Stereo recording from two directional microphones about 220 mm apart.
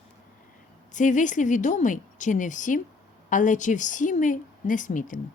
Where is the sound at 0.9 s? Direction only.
35° left (ahead or behind).